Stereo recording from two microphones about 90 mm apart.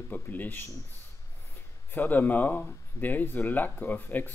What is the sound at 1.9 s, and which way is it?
Speech, 20° left (ahead or behind).